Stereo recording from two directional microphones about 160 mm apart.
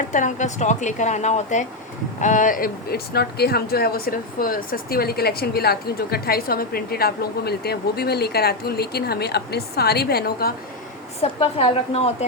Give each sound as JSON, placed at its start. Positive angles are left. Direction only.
{"t": 0.1, "sound": "a woman's voice", "side_deg": 50}
{"t": 11.2, "sound": "a woman's voice", "side_deg": 35}